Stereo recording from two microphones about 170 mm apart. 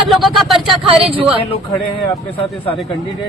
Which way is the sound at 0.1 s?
Centre (ahead or behind).